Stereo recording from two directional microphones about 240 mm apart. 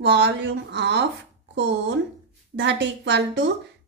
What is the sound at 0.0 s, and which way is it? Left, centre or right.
Speech, right.